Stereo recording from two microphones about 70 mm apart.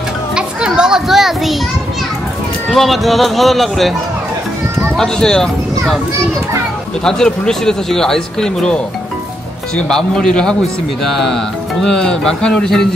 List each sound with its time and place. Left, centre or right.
0.4 s children playing: centre
2.7 s speech: centre
7.1 s speech: centre
9.8 s speech: centre